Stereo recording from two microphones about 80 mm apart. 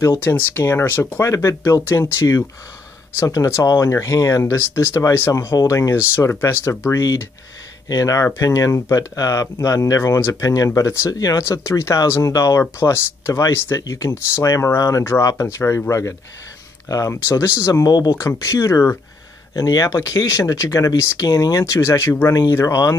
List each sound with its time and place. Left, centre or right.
0.5 s speech: left
7.0 s speech: left
11.1 s speech: left
17.8 s speech: left
18.2 s speech: left
19.5 s speech: left